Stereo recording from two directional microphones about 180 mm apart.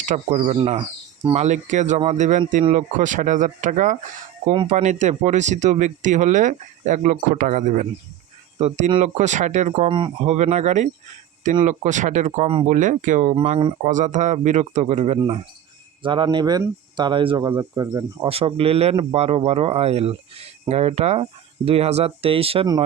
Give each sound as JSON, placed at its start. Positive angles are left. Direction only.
{"t": 0.0, "sound": "speech", "side_deg": -40}
{"t": 9.9, "sound": "speech", "side_deg": -25}
{"t": 10.3, "sound": "speech", "side_deg": -40}
{"t": 16.0, "sound": "speech", "side_deg": -25}